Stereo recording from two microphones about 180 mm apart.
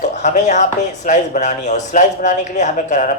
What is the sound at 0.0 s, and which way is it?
Speech, 40° left (ahead or behind).